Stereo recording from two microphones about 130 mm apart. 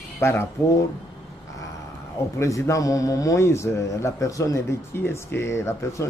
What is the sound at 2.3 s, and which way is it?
A man's voice, 20° left (ahead or behind).